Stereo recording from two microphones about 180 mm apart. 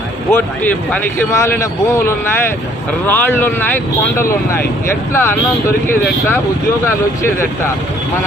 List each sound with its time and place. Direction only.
0.3 s speech: 10° left (ahead or behind)